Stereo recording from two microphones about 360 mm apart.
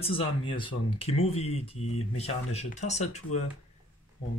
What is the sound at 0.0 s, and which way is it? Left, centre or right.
Speech, centre.